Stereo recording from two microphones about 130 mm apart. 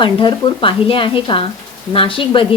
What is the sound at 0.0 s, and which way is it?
A woman's voice, 35° left (ahead or behind).